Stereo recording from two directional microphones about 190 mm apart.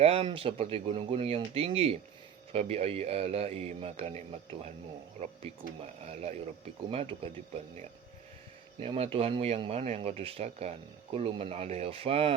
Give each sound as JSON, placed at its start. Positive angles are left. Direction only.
{"t": 0.0, "sound": "speech", "side_deg": -30}